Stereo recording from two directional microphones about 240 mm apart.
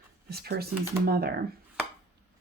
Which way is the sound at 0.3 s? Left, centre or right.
Right.